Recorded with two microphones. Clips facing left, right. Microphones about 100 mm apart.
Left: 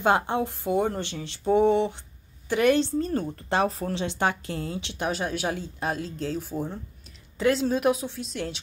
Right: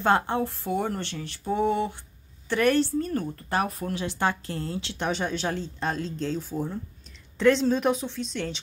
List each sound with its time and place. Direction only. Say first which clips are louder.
0.0 s speech: even; 15° left (ahead or behind)